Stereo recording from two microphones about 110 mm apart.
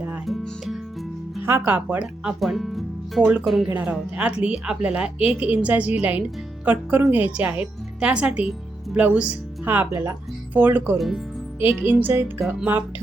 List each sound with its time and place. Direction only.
0.3 s music: centre (ahead or behind)
1.4 s speech: 20° right (ahead or behind); by 3.7 s centre (ahead or behind)
3.7 s speech: 10° right (ahead or behind)
10.9 s speech: centre (ahead or behind)
11.6 s speech: 20° right (ahead or behind)